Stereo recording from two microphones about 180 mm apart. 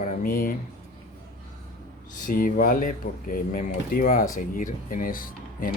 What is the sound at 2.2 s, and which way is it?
Speech, 50° left (ahead or behind).